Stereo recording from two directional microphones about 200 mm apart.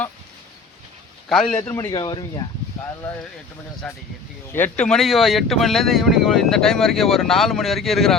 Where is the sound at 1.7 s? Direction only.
15° left (ahead or behind).